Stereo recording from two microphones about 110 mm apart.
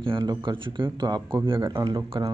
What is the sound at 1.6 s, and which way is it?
Speech, 30° right (ahead or behind).